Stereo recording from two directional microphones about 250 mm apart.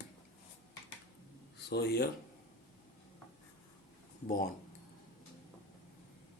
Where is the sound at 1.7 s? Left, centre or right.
Left.